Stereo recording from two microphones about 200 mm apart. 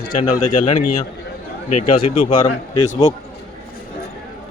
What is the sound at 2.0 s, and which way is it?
Speech, 25° left (ahead or behind).